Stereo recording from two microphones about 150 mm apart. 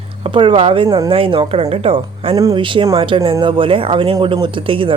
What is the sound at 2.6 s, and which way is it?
A woman's voice, 35° right (ahead or behind).